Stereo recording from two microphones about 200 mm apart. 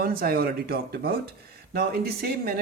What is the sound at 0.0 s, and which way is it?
Speech, 50° right (ahead or behind).